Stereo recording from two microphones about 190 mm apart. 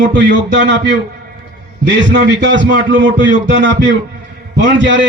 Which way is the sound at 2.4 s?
75° right (ahead or behind).